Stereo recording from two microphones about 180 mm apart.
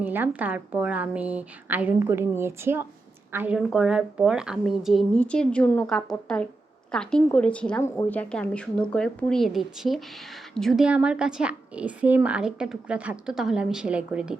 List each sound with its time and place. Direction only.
0.0 s a woman's voice: 10° right (ahead or behind)